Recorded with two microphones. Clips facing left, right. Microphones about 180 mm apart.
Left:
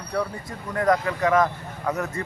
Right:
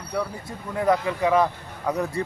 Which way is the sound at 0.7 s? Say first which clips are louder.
Even; 10° right (ahead or behind).